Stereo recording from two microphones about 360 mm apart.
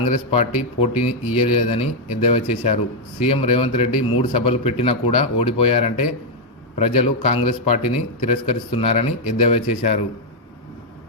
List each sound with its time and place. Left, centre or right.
0.1 s speech: centre